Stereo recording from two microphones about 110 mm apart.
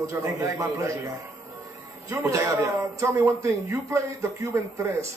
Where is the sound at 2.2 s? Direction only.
25° right (ahead or behind).